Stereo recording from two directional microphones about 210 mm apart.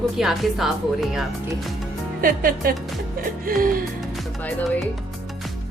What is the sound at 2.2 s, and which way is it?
Music, 45° right (ahead or behind).